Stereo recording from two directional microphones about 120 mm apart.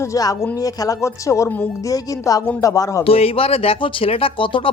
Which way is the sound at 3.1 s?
55° left (ahead or behind).